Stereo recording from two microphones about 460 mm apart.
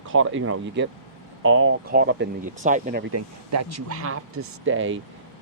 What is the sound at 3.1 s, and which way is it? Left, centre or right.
Speech, right.